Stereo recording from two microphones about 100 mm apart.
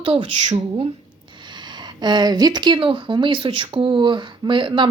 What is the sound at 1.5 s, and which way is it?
Speech, 50° right (ahead or behind).